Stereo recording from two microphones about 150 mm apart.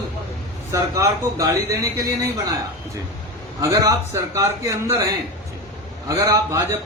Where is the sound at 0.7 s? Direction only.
20° right (ahead or behind).